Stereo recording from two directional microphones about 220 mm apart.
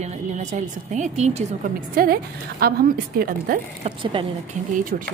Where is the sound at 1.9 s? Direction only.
40° right (ahead or behind).